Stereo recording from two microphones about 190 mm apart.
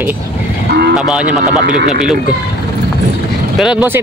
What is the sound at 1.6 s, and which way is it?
Speech, 45° right (ahead or behind).